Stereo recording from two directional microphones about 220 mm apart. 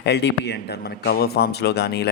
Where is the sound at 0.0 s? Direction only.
50° left (ahead or behind).